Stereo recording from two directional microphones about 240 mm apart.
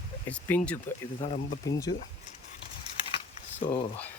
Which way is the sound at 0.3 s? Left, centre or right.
Centre.